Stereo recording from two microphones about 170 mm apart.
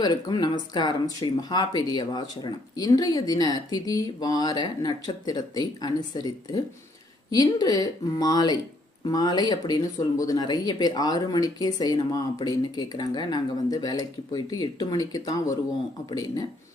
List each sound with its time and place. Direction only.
0.0 s speech: 25° left (ahead or behind)